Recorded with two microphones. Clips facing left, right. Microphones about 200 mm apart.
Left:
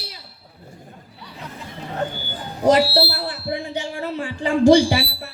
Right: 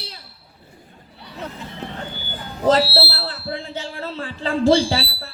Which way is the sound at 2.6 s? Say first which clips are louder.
Left 1 dB; 15° left (ahead or behind).